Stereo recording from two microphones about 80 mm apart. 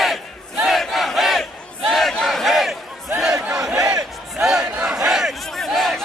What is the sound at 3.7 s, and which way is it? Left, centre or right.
Battle cry, right.